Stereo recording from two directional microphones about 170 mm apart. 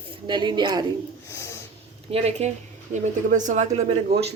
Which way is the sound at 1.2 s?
15° left (ahead or behind).